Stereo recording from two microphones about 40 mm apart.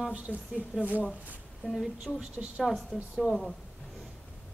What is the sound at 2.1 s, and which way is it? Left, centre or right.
Speech, left.